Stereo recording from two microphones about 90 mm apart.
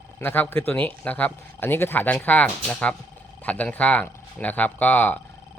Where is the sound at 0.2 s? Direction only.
20° left (ahead or behind).